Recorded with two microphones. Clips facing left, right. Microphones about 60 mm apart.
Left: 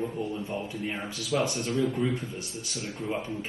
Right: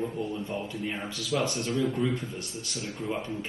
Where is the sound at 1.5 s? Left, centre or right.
Left.